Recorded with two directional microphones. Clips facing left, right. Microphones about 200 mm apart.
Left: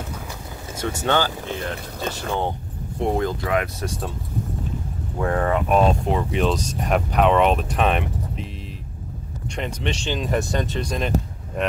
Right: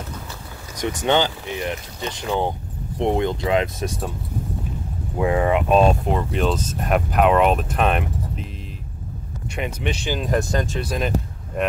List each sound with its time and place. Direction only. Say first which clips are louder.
0.7 s speech: right 2 dB; 20° right (ahead or behind)
2.0 s speech: even; 55° left (ahead or behind)
3.0 s speech: right 2 dB; 20° right (ahead or behind)
5.1 s speech: right 3 dB; 10° right (ahead or behind)
6.0 s speech: even; centre (ahead or behind)
9.6 s speech: right 1 dB; 5° right (ahead or behind)